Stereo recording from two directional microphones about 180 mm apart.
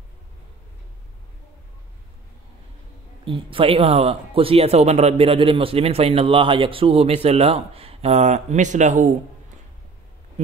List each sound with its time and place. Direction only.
3.3 s speech: 30° right (ahead or behind)